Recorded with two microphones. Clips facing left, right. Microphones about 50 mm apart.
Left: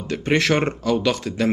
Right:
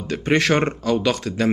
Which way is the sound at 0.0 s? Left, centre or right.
Centre.